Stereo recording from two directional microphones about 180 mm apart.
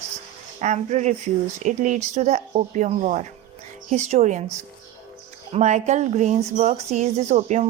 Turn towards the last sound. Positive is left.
turn(degrees=-40)  # may be behind; listen again after turning